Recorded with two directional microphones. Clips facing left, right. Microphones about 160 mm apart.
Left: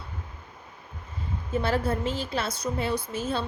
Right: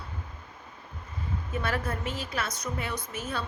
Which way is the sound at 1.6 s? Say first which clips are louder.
Left 6 dB; 30° left (ahead or behind).